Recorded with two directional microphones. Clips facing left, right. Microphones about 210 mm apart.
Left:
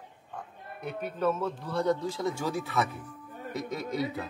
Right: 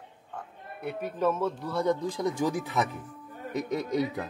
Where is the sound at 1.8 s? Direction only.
15° right (ahead or behind).